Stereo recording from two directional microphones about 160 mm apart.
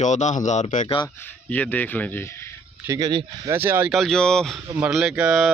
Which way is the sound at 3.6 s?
10° right (ahead or behind).